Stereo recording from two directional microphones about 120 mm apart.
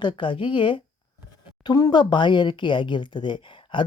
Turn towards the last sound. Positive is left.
turn(degrees=40)  # may be behind; listen again after turning